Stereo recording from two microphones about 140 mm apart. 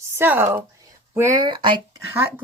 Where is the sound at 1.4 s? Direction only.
35° right (ahead or behind).